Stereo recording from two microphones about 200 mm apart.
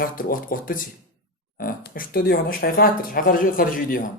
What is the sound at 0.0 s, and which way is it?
Speech, 45° left (ahead or behind).